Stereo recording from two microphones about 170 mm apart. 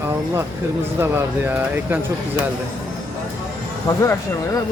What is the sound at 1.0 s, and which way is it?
Speech, 10° right (ahead or behind).